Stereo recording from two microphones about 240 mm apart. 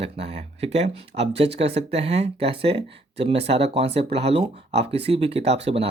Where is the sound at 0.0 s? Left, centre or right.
Right.